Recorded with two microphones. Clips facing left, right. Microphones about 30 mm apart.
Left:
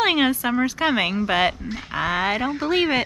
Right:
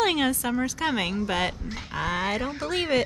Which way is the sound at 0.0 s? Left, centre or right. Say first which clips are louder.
Left 4 dB; left.